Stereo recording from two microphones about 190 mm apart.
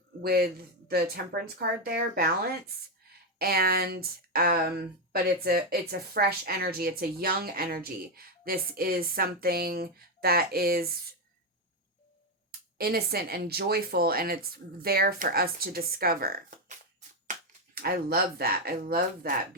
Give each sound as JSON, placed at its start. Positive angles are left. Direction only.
{"t": 0.2, "sound": "speech", "side_deg": -55}
{"t": 12.5, "sound": "speech", "side_deg": -55}
{"t": 17.7, "sound": "speech", "side_deg": -55}